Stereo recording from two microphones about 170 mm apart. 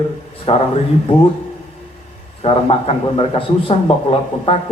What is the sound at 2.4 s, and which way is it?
A man's voice, 35° left (ahead or behind).